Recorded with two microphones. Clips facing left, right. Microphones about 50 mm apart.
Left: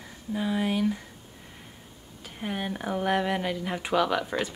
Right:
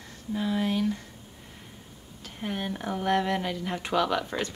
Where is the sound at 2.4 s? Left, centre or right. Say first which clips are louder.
Left 1 dB; centre.